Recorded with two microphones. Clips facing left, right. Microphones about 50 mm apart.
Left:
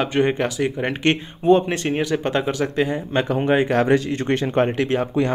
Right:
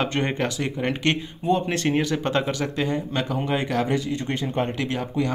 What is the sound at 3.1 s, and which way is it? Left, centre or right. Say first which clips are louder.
Speech: left 6 dB; left.